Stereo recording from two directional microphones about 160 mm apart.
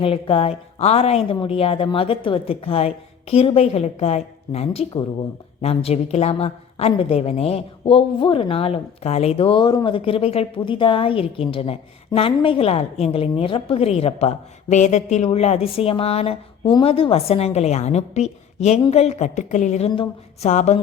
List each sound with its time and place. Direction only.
0.0 s a woman's voice: 35° left (ahead or behind)